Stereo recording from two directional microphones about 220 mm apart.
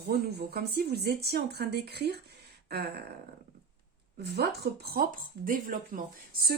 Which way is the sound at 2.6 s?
45° right (ahead or behind).